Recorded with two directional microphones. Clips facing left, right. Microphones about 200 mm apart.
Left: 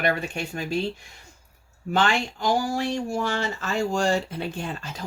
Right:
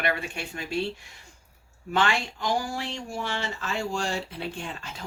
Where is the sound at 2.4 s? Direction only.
40° left (ahead or behind).